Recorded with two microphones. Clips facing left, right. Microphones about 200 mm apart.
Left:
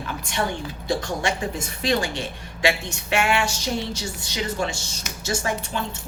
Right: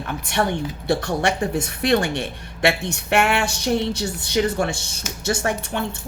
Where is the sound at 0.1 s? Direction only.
60° right (ahead or behind).